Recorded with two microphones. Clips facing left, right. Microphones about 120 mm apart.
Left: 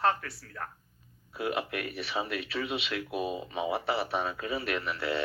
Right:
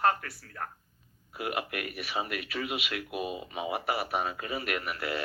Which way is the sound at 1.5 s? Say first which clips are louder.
Left 1 dB; 30° left (ahead or behind).